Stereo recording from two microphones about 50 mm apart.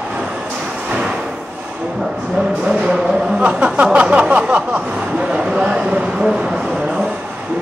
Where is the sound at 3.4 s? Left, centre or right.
Right.